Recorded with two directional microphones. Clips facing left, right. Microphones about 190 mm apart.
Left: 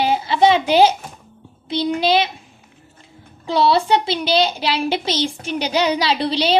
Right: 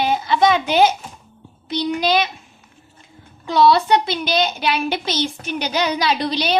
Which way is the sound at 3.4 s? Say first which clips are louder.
Right 1 dB; 30° left (ahead or behind).